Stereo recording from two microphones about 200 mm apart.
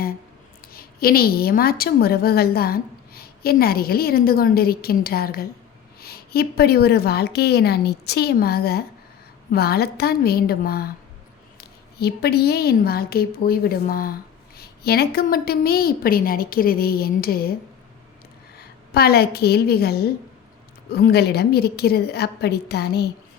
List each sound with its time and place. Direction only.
0.6 s a woman's voice: 50° left (ahead or behind)
11.9 s a woman's voice: 50° left (ahead or behind)
18.9 s a woman's voice: 50° left (ahead or behind)